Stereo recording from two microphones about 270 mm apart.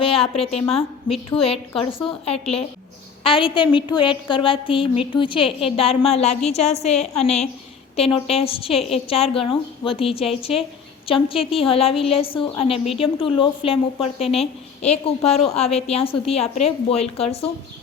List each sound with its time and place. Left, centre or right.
0.0 s a woman's voice: left